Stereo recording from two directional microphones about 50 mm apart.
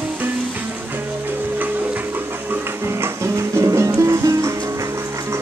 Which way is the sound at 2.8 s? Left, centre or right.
Right.